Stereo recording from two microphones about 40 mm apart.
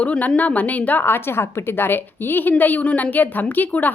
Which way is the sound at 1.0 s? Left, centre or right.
Left.